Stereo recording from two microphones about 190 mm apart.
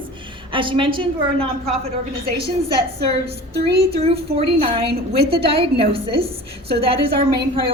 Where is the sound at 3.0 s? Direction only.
30° right (ahead or behind).